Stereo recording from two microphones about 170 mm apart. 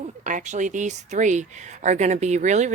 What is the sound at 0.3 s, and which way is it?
Speech, 45° right (ahead or behind).